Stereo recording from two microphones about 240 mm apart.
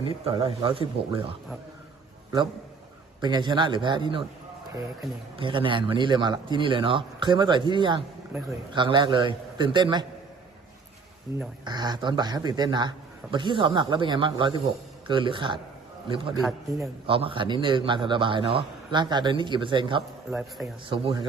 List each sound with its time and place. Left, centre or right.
0.3 s a man's voice: right
3.2 s a man's voice: centre
5.4 s a man's voice: right
11.6 s a man's voice: centre